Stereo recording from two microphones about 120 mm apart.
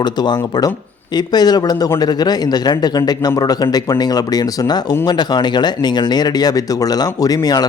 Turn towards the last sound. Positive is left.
turn(degrees=30)  # may be behind; listen again after turning